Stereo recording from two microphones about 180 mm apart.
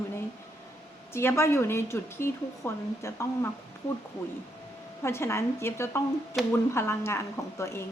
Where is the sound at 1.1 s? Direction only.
15° left (ahead or behind).